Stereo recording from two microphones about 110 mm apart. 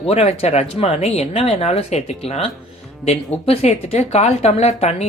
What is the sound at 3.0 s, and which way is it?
Speech, 60° left (ahead or behind).